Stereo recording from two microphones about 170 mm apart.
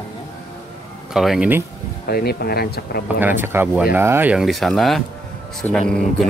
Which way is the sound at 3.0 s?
10° right (ahead or behind).